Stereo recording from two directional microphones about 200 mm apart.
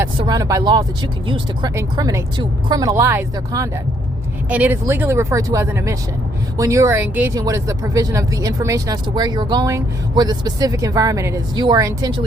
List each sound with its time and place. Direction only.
0.0 s speech: 20° right (ahead or behind)